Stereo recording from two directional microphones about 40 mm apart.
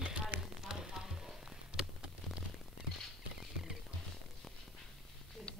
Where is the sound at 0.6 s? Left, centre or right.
Centre.